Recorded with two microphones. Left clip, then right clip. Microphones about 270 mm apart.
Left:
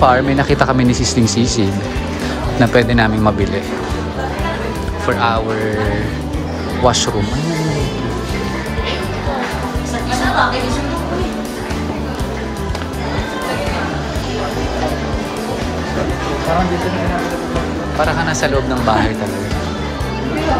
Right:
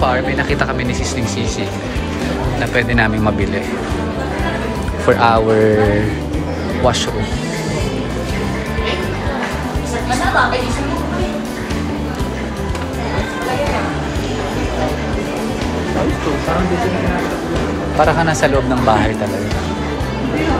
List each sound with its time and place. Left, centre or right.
0.0 s speech: centre
5.0 s speech: centre
6.8 s speech: centre
17.9 s speech: centre